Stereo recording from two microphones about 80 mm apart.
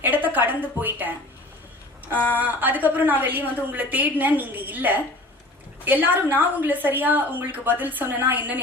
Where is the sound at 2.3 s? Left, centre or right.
Right.